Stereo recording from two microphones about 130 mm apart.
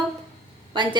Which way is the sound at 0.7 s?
35° right (ahead or behind).